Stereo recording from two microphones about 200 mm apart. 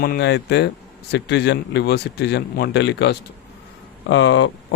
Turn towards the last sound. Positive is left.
turn(degrees=65)  # may be behind; listen again after turning